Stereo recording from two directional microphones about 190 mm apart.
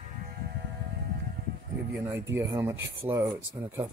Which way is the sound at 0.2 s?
55° right (ahead or behind).